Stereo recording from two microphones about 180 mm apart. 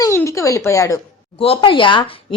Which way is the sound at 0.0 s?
15° left (ahead or behind).